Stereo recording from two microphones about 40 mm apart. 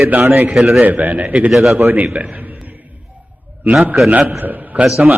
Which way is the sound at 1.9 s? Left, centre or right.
Right.